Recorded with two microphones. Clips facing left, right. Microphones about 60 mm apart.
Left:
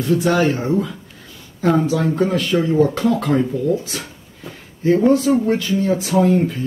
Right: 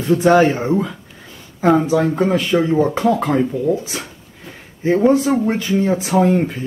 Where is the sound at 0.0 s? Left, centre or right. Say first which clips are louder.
Right 4 dB; right.